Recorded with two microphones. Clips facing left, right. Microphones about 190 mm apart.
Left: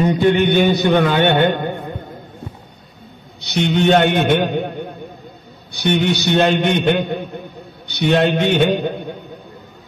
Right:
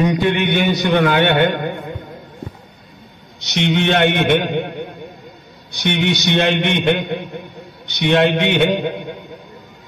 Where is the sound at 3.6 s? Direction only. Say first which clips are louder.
Left 2 dB; 40° left (ahead or behind).